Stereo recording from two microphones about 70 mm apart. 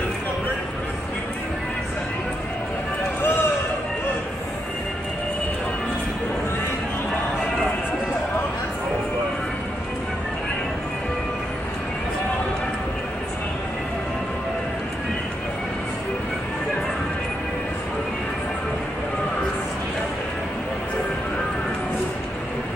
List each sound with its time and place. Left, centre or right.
3.2 s run: left